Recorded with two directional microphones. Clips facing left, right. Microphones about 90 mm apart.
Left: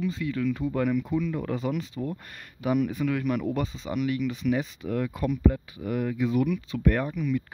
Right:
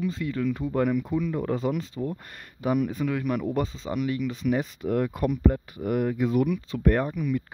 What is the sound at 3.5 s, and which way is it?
Speech, 35° right (ahead or behind).